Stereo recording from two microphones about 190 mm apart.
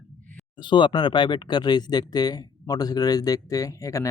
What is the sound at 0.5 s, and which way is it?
Speech, 25° left (ahead or behind).